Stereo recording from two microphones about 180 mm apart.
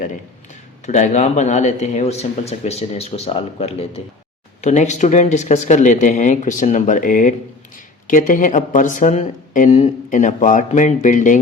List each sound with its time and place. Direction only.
0.9 s speech: 40° left (ahead or behind)